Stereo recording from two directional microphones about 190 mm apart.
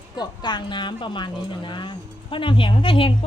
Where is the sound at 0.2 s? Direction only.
25° left (ahead or behind).